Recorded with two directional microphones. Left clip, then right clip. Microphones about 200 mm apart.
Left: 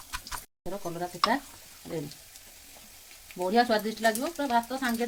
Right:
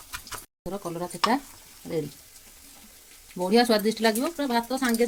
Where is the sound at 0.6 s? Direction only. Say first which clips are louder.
Right 2 dB; 20° right (ahead or behind).